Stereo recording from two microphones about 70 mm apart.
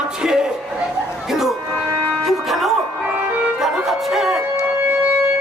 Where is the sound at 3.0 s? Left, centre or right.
Centre.